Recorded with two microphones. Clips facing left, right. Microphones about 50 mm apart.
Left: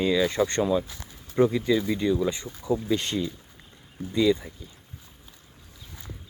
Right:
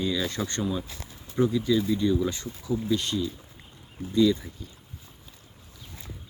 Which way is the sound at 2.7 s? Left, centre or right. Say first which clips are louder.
Left 1 dB; left.